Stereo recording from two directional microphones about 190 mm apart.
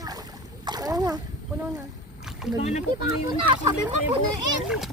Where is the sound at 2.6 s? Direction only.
35° left (ahead or behind).